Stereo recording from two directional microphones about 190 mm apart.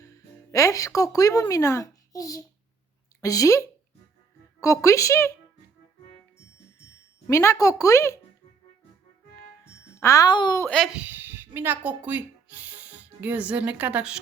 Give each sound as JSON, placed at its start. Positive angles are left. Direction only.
{"t": 0.5, "sound": "a child's voice", "side_deg": 15}
{"t": 4.6, "sound": "a child's voice", "side_deg": 15}
{"t": 7.3, "sound": "a child's voice", "side_deg": 15}
{"t": 10.0, "sound": "a child's voice", "side_deg": 15}
{"t": 10.7, "sound": "speech", "side_deg": 0}